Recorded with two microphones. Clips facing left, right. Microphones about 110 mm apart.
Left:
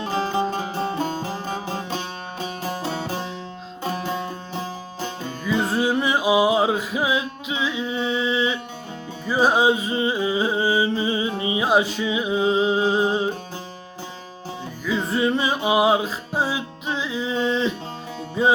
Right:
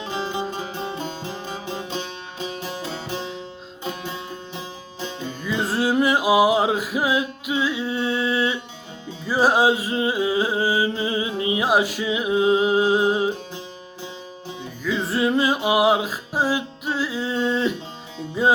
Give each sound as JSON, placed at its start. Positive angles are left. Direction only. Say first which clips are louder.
{"t": 0.0, "sound": "music", "louder": "left 4 dB", "side_deg": 45}
{"t": 5.4, "sound": "music", "louder": "left 2 dB", "side_deg": 0}
{"t": 14.8, "sound": "music", "louder": "even", "side_deg": 0}